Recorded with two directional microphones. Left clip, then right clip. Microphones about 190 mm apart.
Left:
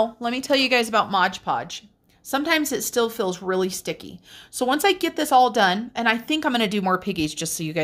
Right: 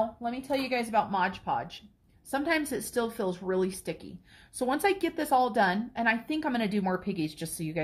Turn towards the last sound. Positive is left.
turn(degrees=35)  # may be behind; listen again after turning